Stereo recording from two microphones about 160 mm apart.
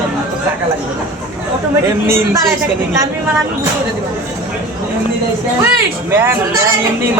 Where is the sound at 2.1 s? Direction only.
15° right (ahead or behind).